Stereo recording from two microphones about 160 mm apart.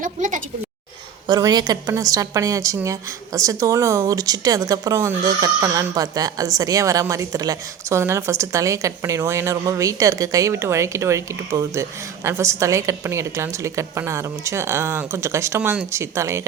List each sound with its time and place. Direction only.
0.0 s a woman's voice: 55° right (ahead or behind)
1.3 s a woman's voice: 25° right (ahead or behind)